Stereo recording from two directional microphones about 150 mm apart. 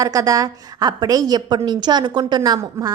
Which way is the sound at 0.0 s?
20° right (ahead or behind).